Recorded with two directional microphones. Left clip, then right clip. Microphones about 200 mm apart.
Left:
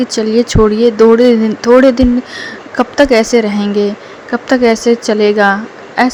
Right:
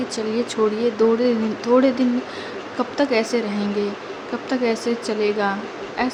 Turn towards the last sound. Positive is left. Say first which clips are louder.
# left 11 dB
turn(degrees=40)  # may be behind; listen again after turning